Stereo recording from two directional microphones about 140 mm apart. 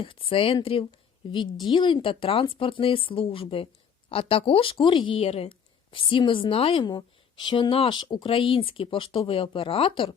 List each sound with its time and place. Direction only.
0.0 s speech: 40° left (ahead or behind)